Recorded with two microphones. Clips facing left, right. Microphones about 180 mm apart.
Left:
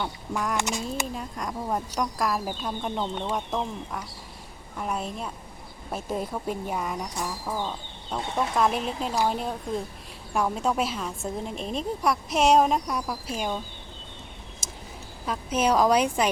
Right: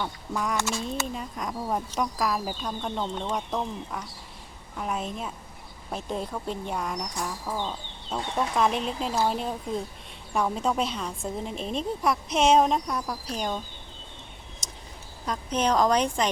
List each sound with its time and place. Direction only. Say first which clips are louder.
0.5 s speech: left 1 dB; 20° left (ahead or behind)
1.0 s speech: even; centre (ahead or behind)
14.6 s a sound: left 3 dB; 5° left (ahead or behind)
15.3 s a woman's voice: left 1 dB; 5° left (ahead or behind)